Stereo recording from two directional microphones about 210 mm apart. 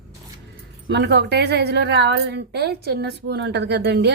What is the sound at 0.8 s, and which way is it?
A woman's voice, 55° right (ahead or behind).